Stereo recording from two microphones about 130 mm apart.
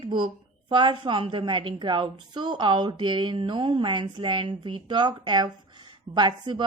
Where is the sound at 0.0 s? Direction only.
40° right (ahead or behind).